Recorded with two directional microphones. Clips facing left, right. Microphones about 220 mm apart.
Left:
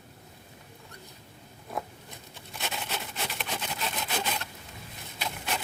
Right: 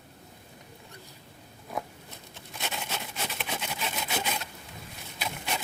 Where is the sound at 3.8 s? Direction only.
Centre (ahead or behind).